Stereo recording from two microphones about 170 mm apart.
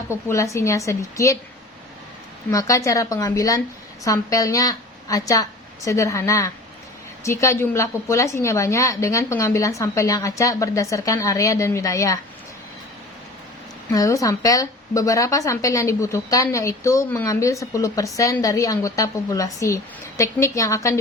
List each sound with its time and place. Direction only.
0.3 s a woman's voice: 15° left (ahead or behind)
2.5 s a woman's voice: 20° left (ahead or behind)
13.9 s a woman's voice: 20° left (ahead or behind)